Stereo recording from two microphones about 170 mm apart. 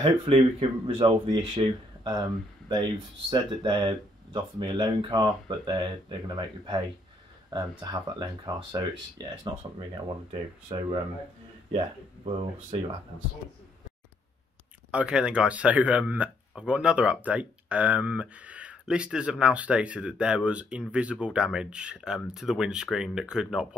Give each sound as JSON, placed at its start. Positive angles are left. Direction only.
{"t": 0.0, "sound": "speech", "side_deg": -30}
{"t": 14.9, "sound": "speech", "side_deg": -5}